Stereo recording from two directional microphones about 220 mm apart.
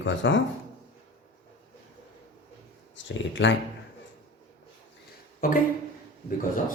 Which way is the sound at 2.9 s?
55° left (ahead or behind).